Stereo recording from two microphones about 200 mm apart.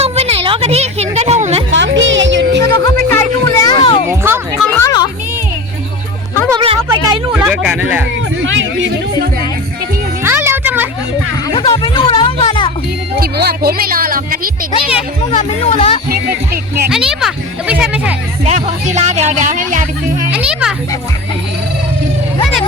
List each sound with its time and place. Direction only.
0.0 s a sound: 30° right (ahead or behind)
1.7 s music: 65° right (ahead or behind)
2.6 s music: 20° left (ahead or behind)
6.8 s a sound: 20° right (ahead or behind)
7.3 s speech: 5° right (ahead or behind)
8.4 s speech: 75° right (ahead or behind)
10.2 s music: 10° right (ahead or behind)
11.5 s music: 20° left (ahead or behind)
13.1 s speech: 50° right (ahead or behind)
15.3 s speech: 35° left (ahead or behind)
16.9 s speech: 5° right (ahead or behind)
18.4 s speech: 35° right (ahead or behind)
20.3 s speech: 5° right (ahead or behind)